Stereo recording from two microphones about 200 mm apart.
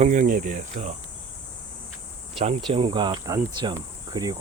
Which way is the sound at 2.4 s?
30° right (ahead or behind).